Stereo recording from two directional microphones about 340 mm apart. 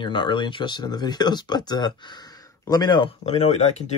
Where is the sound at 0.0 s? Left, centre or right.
Centre.